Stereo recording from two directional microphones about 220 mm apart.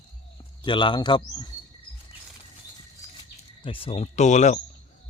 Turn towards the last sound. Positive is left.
turn(degrees=30)  # may be behind; listen again after turning